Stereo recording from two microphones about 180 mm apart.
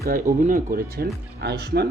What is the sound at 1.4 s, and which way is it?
Speech, 65° right (ahead or behind).